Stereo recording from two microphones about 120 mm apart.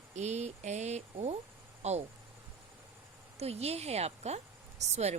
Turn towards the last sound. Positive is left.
turn(degrees=-70)  # may be behind; listen again after turning